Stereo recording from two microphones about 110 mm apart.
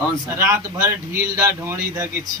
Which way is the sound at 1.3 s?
20° right (ahead or behind).